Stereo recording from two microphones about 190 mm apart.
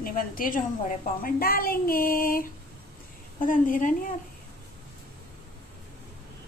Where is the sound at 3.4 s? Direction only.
45° left (ahead or behind).